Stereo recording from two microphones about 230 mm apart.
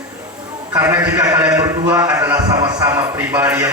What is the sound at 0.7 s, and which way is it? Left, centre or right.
A man's voice, centre.